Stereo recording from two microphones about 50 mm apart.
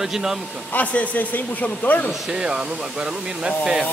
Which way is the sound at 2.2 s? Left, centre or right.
Centre.